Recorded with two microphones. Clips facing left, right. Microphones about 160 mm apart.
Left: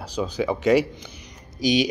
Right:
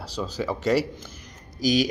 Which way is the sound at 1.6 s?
45° right (ahead or behind).